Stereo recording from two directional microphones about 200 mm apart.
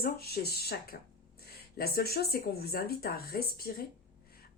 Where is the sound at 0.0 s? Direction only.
50° left (ahead or behind).